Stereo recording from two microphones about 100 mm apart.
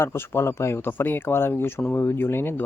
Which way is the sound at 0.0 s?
25° left (ahead or behind).